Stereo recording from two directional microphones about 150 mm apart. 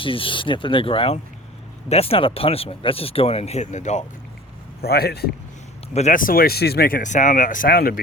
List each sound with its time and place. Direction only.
0.0 s speech: 35° left (ahead or behind); by 4.0 s 50° left (ahead or behind)
4.8 s a man's voice: 90° left
5.9 s speech: 50° left (ahead or behind); by 8.0 s 85° left